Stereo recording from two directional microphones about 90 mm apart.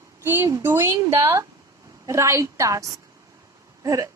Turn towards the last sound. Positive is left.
turn(degrees=-40)  # may be behind; listen again after turning